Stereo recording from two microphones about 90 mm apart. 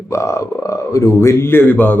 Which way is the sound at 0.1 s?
35° left (ahead or behind).